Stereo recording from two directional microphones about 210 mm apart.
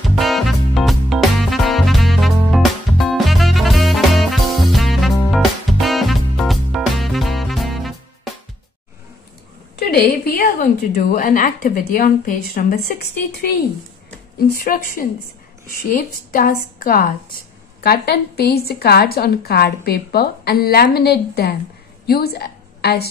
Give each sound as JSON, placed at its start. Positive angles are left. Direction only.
{"t": 0.2, "sound": "music", "side_deg": 0}
{"t": 9.8, "sound": "a woman's voice", "side_deg": 50}